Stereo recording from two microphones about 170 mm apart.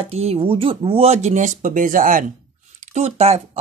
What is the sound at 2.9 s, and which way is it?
Speech, 40° right (ahead or behind).